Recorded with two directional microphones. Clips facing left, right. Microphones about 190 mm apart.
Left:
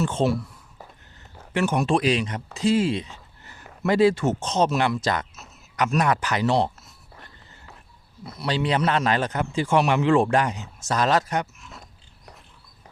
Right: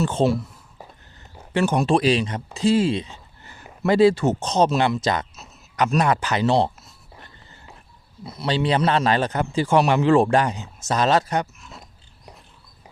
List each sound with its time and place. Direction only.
0.0 s a man's voice: 35° right (ahead or behind)
1.5 s a man's voice: 30° right (ahead or behind)
5.4 s speech: 35° right (ahead or behind)
8.4 s a man's voice: 25° right (ahead or behind)